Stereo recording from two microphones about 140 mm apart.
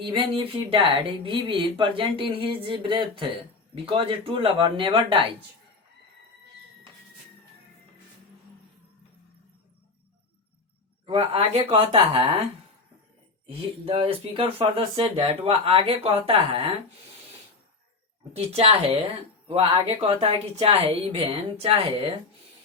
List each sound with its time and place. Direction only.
0.0 s speech: 35° right (ahead or behind)
11.0 s speech: 40° right (ahead or behind)
13.5 s speech: 40° right (ahead or behind)
18.3 s speech: 40° right (ahead or behind)